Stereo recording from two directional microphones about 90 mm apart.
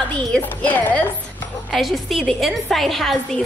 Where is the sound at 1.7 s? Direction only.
Centre (ahead or behind).